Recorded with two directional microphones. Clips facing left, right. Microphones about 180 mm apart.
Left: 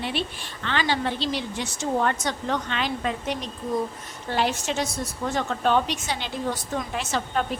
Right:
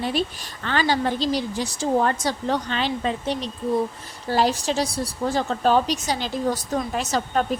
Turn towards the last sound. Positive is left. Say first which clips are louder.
# right 3 dB
turn(degrees=-40)  # may be behind; listen again after turning